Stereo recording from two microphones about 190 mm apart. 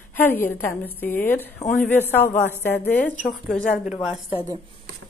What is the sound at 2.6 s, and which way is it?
A woman's voice, 10° left (ahead or behind).